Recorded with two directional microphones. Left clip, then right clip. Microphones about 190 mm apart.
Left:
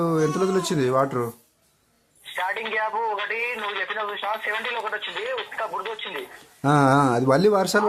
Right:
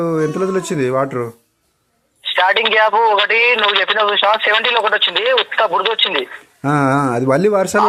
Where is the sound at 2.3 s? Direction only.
40° right (ahead or behind).